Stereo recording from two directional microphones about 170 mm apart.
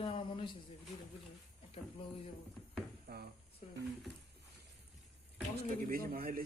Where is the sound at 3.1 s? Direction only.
70° right (ahead or behind).